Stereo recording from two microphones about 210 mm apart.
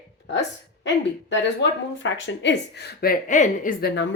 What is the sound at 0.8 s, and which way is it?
Speech, 60° left (ahead or behind).